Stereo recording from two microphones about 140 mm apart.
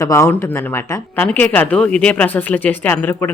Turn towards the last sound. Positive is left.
turn(degrees=15)  # may be behind; listen again after turning